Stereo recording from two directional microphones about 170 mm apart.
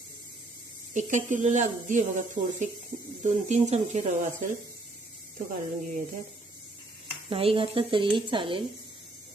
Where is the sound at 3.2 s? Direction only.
45° right (ahead or behind).